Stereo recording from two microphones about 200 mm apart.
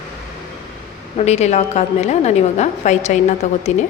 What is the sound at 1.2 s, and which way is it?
A woman's voice, 35° left (ahead or behind).